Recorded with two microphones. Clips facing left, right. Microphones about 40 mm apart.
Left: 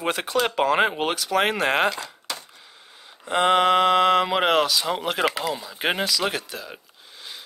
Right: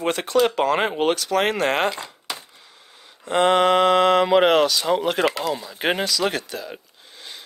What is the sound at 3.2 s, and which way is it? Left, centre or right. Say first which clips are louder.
Speech: right 2 dB; centre.